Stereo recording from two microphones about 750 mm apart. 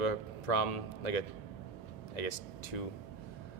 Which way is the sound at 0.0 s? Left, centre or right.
Left.